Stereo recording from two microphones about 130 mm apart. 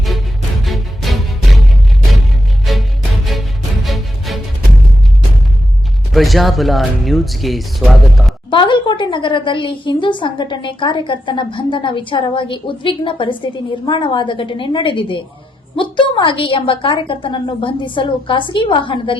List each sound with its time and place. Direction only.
0.6 s music: centre (ahead or behind)
2.7 s music: centre (ahead or behind)
3.8 s music: centre (ahead or behind)
6.1 s speech: centre (ahead or behind)
8.4 s a woman's voice: 40° left (ahead or behind)